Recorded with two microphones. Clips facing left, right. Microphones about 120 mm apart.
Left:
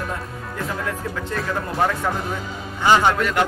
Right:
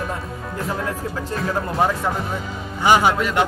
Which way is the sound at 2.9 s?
10° right (ahead or behind).